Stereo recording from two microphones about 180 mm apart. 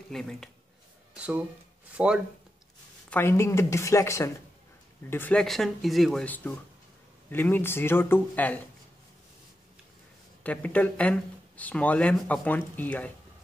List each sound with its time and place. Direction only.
0.1 s speech: centre (ahead or behind)
1.1 s a sound: 5° right (ahead or behind)
1.9 s speech: 5° right (ahead or behind)
3.1 s speech: 15° left (ahead or behind)
10.4 s speech: 10° left (ahead or behind)